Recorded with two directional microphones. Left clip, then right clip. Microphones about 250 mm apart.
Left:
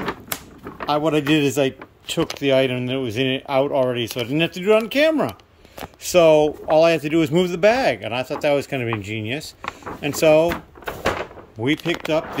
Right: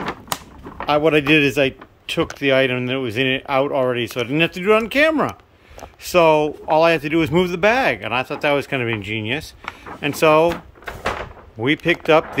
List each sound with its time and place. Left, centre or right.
0.8 s speech: centre
10.9 s door: left
11.6 s speech: centre